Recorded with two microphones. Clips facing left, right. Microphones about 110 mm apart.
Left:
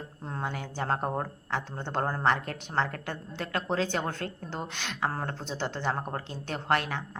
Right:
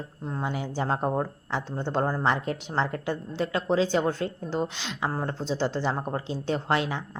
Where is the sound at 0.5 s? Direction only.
15° right (ahead or behind).